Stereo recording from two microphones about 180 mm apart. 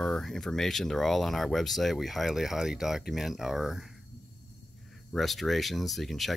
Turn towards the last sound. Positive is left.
turn(degrees=0)  # may be behind; listen again after turning